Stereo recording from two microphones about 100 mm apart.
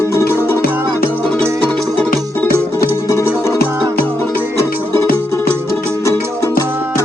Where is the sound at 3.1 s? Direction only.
30° left (ahead or behind).